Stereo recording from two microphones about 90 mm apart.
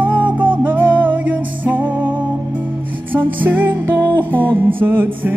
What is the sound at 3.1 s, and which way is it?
Music, 20° right (ahead or behind).